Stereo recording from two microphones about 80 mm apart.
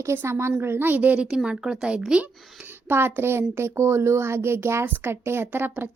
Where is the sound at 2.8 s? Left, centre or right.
Right.